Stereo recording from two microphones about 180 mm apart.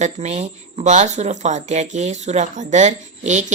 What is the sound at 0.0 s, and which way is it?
Speech, 40° right (ahead or behind).